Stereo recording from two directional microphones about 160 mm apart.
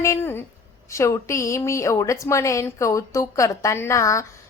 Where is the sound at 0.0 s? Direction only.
15° left (ahead or behind).